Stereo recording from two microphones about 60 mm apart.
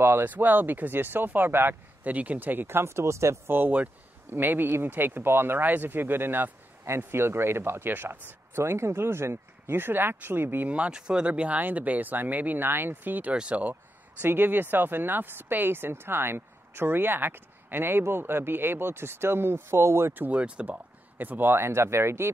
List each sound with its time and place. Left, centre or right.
0.0 s speech: right
3.4 s speech: right
10.7 s speech: centre; by 13.3 s right
13.3 s speech: right
14.2 s speech: right
20.2 s speech: right